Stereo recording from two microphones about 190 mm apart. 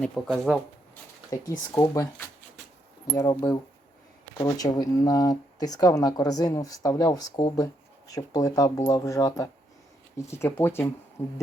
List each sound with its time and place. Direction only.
0.0 s speech: centre (ahead or behind)
1.3 s speech: 15° left (ahead or behind)